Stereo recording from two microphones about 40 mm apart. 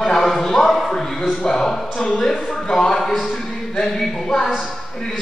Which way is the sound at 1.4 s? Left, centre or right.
Centre.